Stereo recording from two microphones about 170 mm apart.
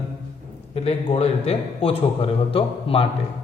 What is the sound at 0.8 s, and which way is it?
A man's voice, 35° left (ahead or behind).